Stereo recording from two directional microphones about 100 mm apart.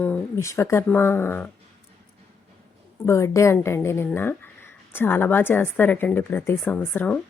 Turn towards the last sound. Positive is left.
turn(degrees=15)  # may be behind; listen again after turning